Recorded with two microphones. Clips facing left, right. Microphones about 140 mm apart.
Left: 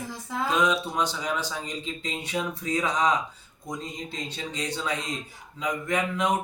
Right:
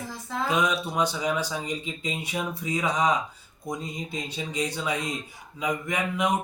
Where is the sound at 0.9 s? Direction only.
10° right (ahead or behind).